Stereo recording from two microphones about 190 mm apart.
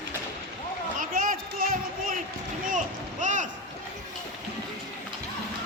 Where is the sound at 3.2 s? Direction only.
40° right (ahead or behind).